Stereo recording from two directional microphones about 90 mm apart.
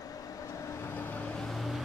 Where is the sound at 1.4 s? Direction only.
Centre (ahead or behind).